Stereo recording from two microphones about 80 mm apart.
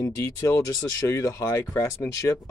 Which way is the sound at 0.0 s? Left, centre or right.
Left.